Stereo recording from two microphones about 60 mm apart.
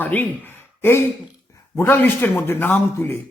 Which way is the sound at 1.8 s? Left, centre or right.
Left.